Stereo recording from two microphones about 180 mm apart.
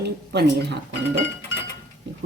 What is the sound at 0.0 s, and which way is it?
Speech, 65° right (ahead or behind).